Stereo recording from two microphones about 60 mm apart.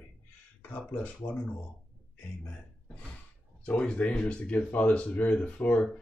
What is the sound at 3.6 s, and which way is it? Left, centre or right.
Speech, left.